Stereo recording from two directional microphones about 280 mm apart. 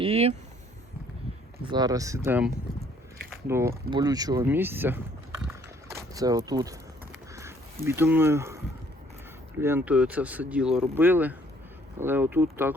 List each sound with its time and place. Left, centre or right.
0.0 s speech: right
1.7 s speech: centre
5.5 s a sound: centre
9.6 s speech: centre